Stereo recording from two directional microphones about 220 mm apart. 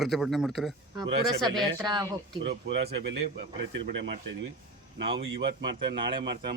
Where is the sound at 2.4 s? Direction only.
50° right (ahead or behind).